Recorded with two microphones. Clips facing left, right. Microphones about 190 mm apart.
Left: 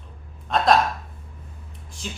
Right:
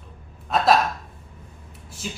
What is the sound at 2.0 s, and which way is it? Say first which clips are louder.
Speech: right 2 dB; 5° right (ahead or behind).